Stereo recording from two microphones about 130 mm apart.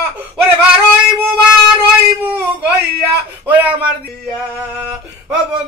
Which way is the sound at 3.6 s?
10° right (ahead or behind).